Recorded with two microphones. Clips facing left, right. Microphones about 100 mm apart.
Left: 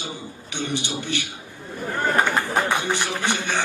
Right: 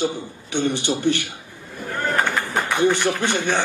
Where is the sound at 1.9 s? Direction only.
15° left (ahead or behind).